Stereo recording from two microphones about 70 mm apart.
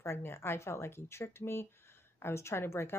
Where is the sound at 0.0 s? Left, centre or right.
Left.